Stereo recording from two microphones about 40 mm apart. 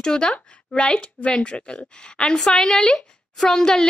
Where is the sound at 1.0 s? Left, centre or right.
Left.